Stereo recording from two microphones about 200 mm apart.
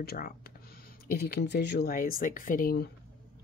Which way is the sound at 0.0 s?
50° left (ahead or behind).